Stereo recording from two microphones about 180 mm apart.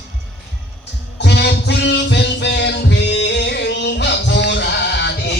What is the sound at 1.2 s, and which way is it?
Music, 70° left (ahead or behind).